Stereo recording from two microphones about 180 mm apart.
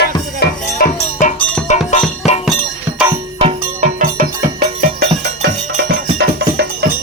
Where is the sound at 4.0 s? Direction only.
50° right (ahead or behind).